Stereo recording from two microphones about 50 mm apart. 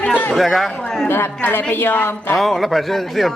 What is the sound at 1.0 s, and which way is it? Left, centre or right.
A woman's voice, left.